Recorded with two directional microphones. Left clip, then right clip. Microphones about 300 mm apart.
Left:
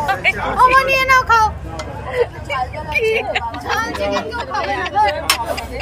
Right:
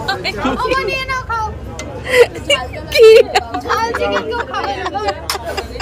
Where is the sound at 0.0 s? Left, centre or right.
Centre.